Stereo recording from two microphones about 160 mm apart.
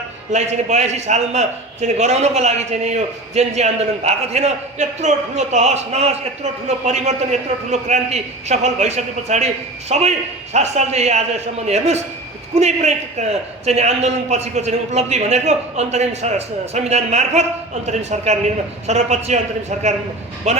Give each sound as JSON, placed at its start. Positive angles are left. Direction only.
{"t": 0.3, "sound": "a man's voice", "side_deg": -45}
{"t": 20.5, "sound": "a man's voice", "side_deg": -45}